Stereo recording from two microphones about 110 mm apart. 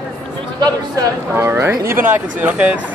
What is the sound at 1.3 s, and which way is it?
Speech, 25° right (ahead or behind).